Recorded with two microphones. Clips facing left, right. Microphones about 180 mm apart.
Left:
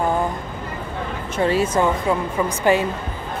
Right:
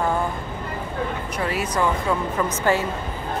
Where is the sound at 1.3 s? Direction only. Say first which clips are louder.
Left 9 dB; 30° left (ahead or behind).